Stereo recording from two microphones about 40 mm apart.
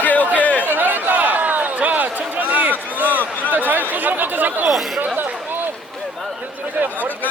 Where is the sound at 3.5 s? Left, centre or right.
Right.